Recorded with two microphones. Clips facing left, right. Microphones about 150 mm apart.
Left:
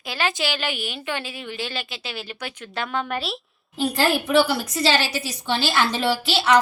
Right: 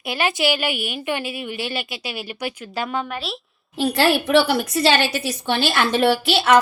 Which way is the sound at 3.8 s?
75° right (ahead or behind).